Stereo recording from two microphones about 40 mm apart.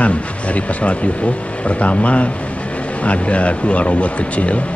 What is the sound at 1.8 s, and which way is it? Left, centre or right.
Speech, left.